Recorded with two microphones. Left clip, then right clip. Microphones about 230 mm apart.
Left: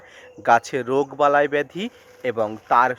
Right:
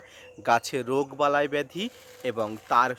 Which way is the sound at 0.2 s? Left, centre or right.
Centre.